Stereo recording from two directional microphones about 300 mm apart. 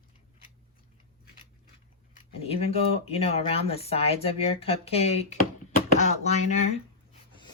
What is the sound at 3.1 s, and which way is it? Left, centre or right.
Speech, centre.